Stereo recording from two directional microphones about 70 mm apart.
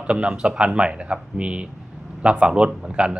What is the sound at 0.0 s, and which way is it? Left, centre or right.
Speech, centre.